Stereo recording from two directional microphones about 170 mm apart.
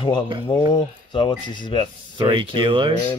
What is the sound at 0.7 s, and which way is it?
Speech, 30° left (ahead or behind).